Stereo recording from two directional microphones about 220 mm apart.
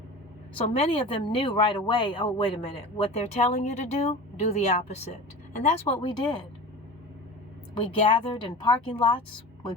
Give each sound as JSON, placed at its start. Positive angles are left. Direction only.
{"t": 0.5, "sound": "speech", "side_deg": 25}
{"t": 8.0, "sound": "speech", "side_deg": 25}